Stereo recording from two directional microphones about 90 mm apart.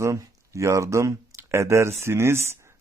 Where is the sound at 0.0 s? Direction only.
35° right (ahead or behind).